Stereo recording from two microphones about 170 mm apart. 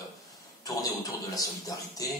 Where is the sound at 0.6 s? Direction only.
20° left (ahead or behind).